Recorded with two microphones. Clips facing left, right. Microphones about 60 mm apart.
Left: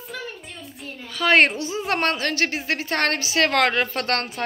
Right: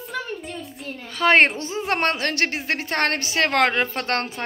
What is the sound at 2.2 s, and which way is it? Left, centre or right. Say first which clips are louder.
Speech: even; right.